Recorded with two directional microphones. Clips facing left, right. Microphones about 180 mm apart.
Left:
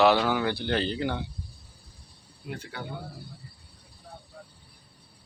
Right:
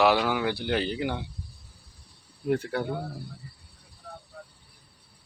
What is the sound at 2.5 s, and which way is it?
Speech, 55° right (ahead or behind).